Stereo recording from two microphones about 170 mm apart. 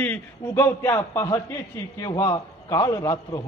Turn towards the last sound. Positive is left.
turn(degrees=20)  # may be behind; listen again after turning